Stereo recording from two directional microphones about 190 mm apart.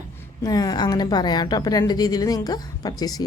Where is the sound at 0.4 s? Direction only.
20° left (ahead or behind).